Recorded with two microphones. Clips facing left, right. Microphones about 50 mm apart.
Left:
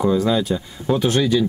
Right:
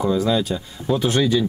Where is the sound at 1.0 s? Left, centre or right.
Centre.